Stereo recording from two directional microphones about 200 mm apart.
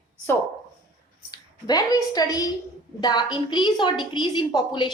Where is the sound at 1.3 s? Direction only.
20° left (ahead or behind).